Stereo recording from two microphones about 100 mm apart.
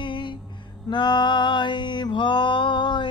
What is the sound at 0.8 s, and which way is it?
Mantra, 50° left (ahead or behind).